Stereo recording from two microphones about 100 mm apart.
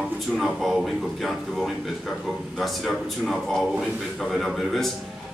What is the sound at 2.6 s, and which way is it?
Speech, centre (ahead or behind).